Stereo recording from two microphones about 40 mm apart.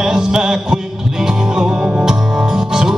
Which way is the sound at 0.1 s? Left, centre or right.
Centre.